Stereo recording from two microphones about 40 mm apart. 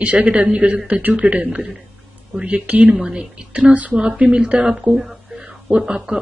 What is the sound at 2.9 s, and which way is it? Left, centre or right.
Speech, centre.